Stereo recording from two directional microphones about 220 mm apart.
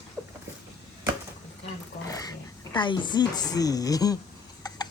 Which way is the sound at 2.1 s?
15° left (ahead or behind).